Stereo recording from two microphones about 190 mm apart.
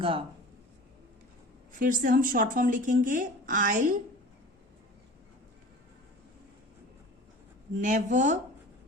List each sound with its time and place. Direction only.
0.0 s speech: 30° right (ahead or behind)
1.8 s speech: 45° right (ahead or behind)
7.8 s speech: 40° right (ahead or behind)